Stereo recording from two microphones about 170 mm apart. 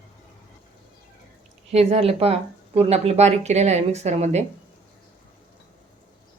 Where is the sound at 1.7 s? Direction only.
40° right (ahead or behind).